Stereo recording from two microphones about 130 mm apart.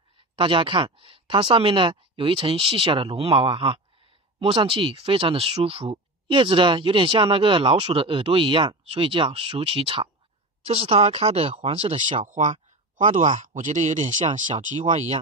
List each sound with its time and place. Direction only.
0.4 s speech: 40° right (ahead or behind)
12.3 s speech: 75° right (ahead or behind)